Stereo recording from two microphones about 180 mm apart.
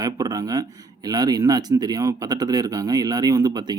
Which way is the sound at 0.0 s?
20° right (ahead or behind).